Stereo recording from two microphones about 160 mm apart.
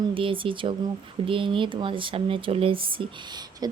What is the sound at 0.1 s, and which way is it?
A woman's voice, 35° right (ahead or behind).